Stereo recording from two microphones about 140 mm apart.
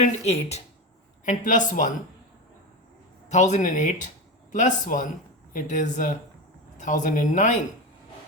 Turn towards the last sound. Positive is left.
turn(degrees=65)  # may be behind; listen again after turning